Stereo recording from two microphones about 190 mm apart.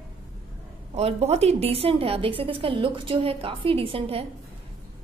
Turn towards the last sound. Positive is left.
turn(degrees=-30)  # may be behind; listen again after turning